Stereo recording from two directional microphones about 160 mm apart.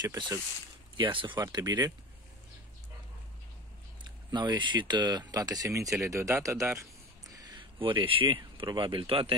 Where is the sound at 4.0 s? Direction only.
30° right (ahead or behind).